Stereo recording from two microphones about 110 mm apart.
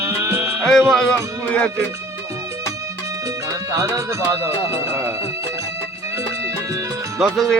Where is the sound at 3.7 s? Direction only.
25° right (ahead or behind).